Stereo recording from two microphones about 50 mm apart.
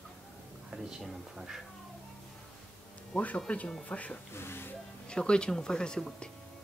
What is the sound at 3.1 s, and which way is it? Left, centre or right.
Speech, left.